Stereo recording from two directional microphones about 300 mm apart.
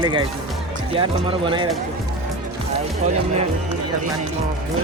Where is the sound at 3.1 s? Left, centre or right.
Right.